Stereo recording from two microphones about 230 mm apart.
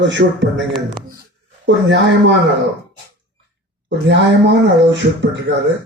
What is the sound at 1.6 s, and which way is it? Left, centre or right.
Speech, right.